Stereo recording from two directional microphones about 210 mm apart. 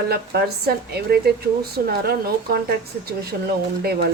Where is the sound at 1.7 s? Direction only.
50° right (ahead or behind).